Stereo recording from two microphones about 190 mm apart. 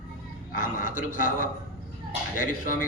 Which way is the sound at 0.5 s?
45° left (ahead or behind).